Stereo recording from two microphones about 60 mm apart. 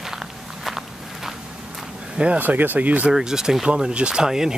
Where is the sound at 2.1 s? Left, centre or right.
Centre.